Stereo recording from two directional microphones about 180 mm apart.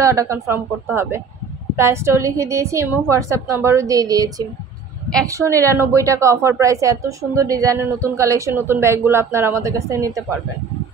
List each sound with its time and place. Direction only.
0.0 s a woman's voice: 15° right (ahead or behind)